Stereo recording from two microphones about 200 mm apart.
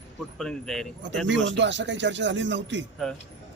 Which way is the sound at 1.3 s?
65° right (ahead or behind).